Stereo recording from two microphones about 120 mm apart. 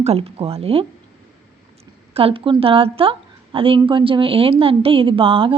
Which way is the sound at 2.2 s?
50° right (ahead or behind).